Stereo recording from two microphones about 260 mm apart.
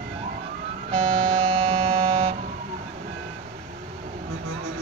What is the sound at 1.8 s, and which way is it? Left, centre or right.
Buzzer, right.